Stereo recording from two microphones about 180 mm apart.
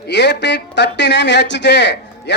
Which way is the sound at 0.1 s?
70° left (ahead or behind).